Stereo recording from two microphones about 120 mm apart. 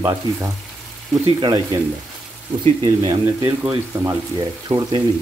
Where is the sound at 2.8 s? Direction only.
40° right (ahead or behind).